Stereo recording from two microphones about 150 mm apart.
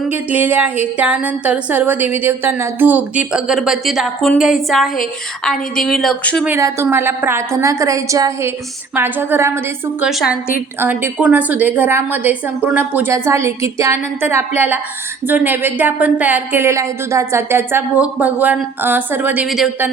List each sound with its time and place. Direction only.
0.1 s a woman's voice: 10° right (ahead or behind)
6.6 s a woman's voice: 20° right (ahead or behind)
10.0 s a woman's voice: 5° right (ahead or behind)
19.5 s speech: centre (ahead or behind)